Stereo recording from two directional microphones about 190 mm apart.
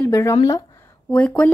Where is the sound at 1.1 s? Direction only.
10° left (ahead or behind).